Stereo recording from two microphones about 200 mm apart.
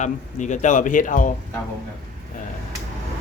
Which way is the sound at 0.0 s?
35° left (ahead or behind).